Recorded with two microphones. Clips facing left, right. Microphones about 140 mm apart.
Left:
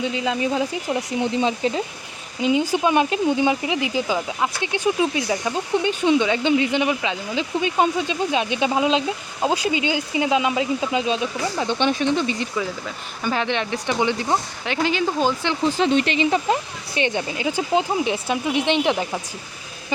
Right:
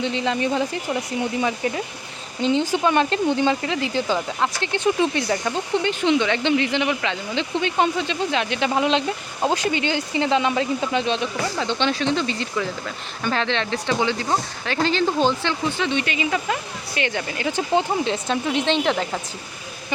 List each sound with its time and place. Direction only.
0.0 s speech: 5° left (ahead or behind)
1.2 s speech: 20° left (ahead or behind)
2.4 s speech: 10° left (ahead or behind)
15.6 s speech: 35° left (ahead or behind); by 19.2 s 15° left (ahead or behind)